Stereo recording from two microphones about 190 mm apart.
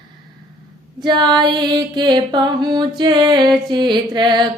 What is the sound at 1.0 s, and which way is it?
Music, 25° right (ahead or behind).